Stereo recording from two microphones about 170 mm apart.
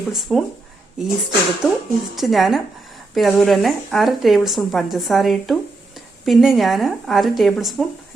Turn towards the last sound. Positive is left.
turn(degrees=0)  # may be behind; listen again after turning